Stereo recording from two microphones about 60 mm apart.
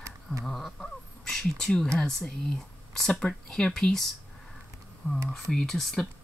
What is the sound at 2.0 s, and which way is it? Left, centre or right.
Speech, centre.